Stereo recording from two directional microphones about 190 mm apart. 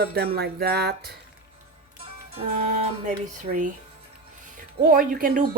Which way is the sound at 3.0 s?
45° right (ahead or behind).